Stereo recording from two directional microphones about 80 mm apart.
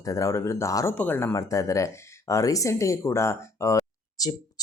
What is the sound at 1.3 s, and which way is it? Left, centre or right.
Speech, left.